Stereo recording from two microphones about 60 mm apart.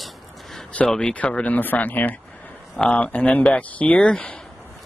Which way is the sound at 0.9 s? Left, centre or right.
Centre.